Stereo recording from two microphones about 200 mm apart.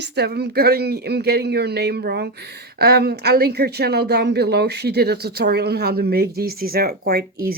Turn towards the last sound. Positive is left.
turn(degrees=-50)  # may be behind; listen again after turning